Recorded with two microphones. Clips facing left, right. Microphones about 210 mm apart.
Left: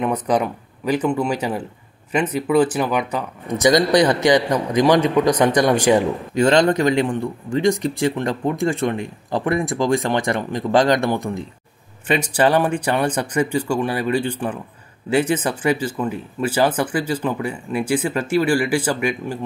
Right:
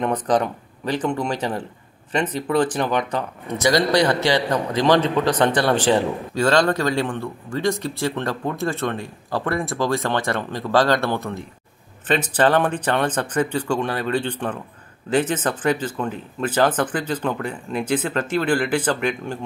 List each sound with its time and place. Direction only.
0.0 s speech: 10° left (ahead or behind)